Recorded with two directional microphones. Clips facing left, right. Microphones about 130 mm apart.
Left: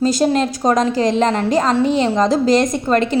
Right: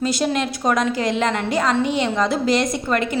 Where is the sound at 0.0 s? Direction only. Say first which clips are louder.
Left 5 dB; 40° left (ahead or behind).